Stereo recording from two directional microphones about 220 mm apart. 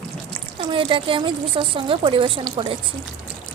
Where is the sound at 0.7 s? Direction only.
25° right (ahead or behind).